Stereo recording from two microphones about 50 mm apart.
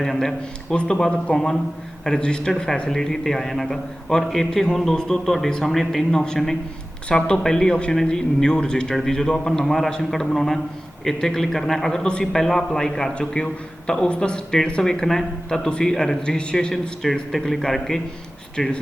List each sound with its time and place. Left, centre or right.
0.0 s a man's voice: centre
17.0 s a man's voice: centre